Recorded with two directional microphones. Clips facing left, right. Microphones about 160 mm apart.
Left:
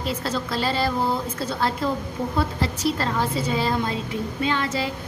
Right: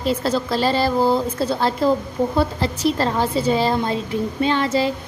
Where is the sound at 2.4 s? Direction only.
30° right (ahead or behind).